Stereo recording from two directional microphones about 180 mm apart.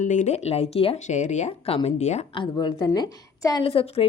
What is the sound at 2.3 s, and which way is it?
A woman's voice, 25° left (ahead or behind).